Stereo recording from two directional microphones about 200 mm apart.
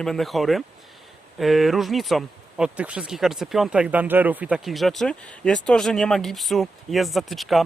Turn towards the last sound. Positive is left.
turn(degrees=0)  # may be behind; listen again after turning